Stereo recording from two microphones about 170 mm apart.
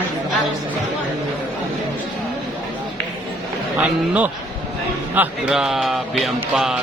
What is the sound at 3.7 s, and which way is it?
A man's voice, 10° right (ahead or behind).